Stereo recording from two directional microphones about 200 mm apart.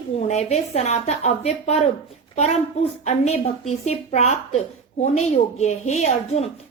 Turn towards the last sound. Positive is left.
turn(degrees=35)  # may be behind; listen again after turning